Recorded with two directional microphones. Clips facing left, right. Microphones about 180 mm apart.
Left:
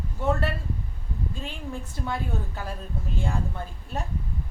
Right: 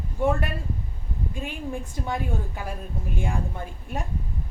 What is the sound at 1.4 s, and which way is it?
Speech, 15° right (ahead or behind).